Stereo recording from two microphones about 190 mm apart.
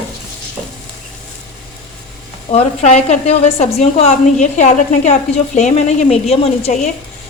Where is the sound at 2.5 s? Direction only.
35° left (ahead or behind).